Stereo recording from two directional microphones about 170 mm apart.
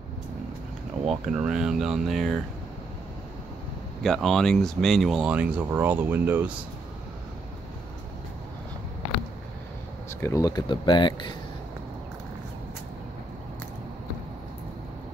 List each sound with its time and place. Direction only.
1.0 s speech: centre (ahead or behind)
4.0 s speech: centre (ahead or behind)
10.2 s speech: 20° left (ahead or behind)